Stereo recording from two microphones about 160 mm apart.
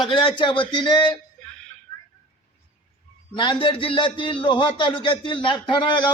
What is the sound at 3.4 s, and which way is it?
A man's voice, 30° left (ahead or behind).